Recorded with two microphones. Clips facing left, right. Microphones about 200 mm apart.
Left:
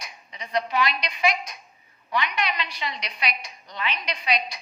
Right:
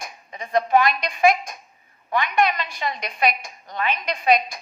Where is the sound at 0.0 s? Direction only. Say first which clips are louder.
Right 5 dB; 50° right (ahead or behind).